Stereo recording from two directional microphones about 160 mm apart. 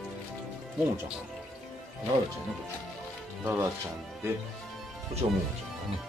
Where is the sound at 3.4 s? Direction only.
15° right (ahead or behind).